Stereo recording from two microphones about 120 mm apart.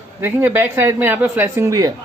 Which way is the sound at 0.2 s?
15° right (ahead or behind).